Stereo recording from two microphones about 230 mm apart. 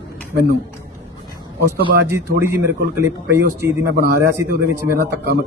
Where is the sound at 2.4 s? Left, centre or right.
Centre.